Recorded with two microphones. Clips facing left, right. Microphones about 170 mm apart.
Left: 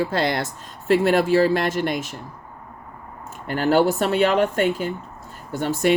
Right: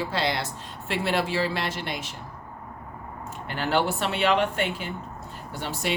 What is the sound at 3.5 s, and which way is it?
Speech, 40° left (ahead or behind).